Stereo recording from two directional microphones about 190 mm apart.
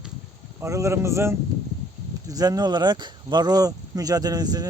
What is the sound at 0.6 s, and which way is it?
A man's voice, 15° right (ahead or behind).